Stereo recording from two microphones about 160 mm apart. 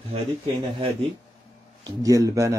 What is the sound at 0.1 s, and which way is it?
Speech, 35° right (ahead or behind).